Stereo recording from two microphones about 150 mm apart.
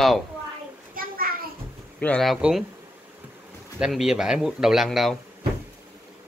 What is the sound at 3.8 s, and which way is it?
Speech, 5° right (ahead or behind).